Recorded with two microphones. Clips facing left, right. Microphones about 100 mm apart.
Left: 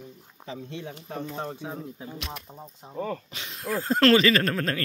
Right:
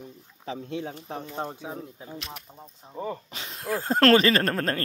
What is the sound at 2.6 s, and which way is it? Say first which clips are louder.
Speech: left 3 dB; 10° left (ahead or behind).